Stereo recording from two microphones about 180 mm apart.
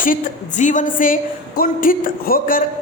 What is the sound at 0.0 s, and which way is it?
A woman's voice, 45° left (ahead or behind).